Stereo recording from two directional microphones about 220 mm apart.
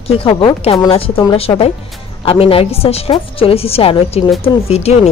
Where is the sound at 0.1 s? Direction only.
25° left (ahead or behind).